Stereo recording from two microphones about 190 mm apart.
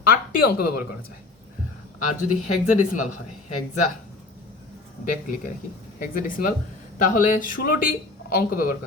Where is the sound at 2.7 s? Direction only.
40° left (ahead or behind).